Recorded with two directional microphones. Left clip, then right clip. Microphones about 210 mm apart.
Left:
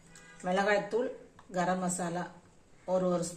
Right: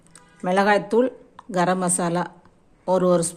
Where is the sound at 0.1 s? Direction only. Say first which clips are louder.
Right 10 dB; 40° right (ahead or behind).